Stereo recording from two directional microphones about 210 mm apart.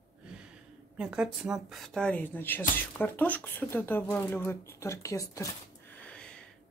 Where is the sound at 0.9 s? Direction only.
5° right (ahead or behind); by 5.5 s 15° left (ahead or behind).